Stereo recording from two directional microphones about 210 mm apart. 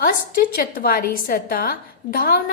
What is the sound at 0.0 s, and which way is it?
A woman's voice, 40° left (ahead or behind).